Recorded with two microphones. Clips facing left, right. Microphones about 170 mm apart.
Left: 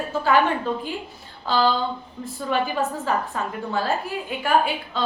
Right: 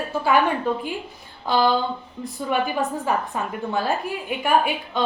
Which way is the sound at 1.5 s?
15° right (ahead or behind).